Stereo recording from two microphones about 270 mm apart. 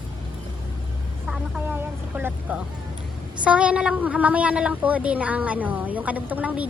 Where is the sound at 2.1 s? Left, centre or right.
Centre.